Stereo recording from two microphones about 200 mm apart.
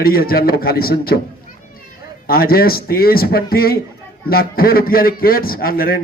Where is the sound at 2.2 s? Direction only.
50° left (ahead or behind).